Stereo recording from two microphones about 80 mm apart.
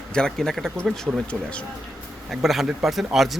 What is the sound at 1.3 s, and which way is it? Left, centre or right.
Speech, centre.